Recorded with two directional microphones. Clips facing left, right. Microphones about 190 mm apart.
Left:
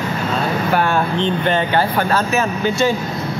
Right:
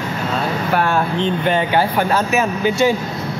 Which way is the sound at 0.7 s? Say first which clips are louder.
Right 1 dB; centre (ahead or behind).